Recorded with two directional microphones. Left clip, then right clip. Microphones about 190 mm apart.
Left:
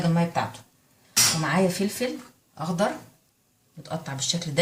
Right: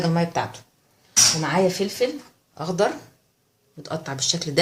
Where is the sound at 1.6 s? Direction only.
40° right (ahead or behind).